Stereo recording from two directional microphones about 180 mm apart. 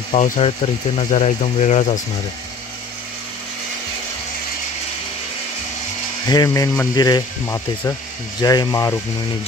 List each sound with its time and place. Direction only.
0.1 s speech: 35° left (ahead or behind)
6.2 s speech: 20° left (ahead or behind)